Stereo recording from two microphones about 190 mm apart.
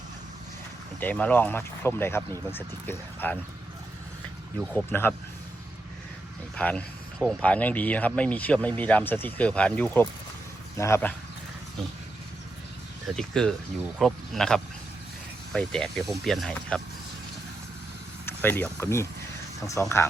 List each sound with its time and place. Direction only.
0.9 s speech: 10° left (ahead or behind)
4.7 s speech: 10° left (ahead or behind)
6.6 s speech: 5° left (ahead or behind)
13.1 s speech: 5° left (ahead or behind)
18.3 s speech: 10° left (ahead or behind)